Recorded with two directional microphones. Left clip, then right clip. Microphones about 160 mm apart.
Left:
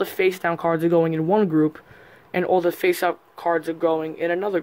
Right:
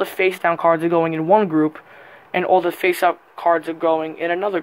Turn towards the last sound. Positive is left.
turn(degrees=30)  # may be behind; listen again after turning